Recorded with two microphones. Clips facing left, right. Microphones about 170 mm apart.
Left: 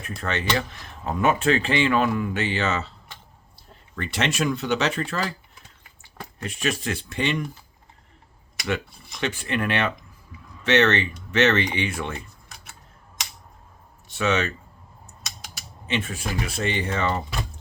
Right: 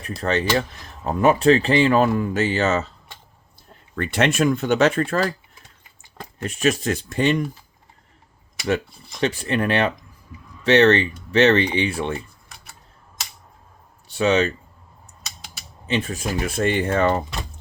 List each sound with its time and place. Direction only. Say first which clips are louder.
0.0 s speech: right 6 dB; 35° right (ahead or behind)
3.9 s speech: right 6 dB; 55° right (ahead or behind)
6.4 s speech: right 6 dB; 45° right (ahead or behind)
9.2 s speech: right 4 dB; 35° right (ahead or behind)
14.1 s speech: right 5 dB; 35° right (ahead or behind)
15.9 s speech: right 4 dB; 35° right (ahead or behind)